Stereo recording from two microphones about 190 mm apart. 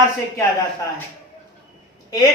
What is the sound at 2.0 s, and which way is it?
Speech, 20° left (ahead or behind).